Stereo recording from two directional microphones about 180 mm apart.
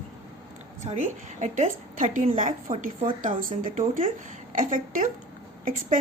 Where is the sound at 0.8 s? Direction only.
40° right (ahead or behind).